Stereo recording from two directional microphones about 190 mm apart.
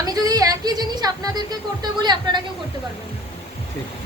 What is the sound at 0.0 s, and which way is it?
Speech, 20° right (ahead or behind).